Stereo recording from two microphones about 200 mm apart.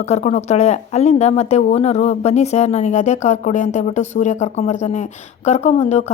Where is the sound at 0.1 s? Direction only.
35° left (ahead or behind).